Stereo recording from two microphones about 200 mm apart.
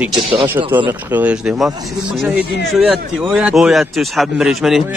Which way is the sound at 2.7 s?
5° right (ahead or behind).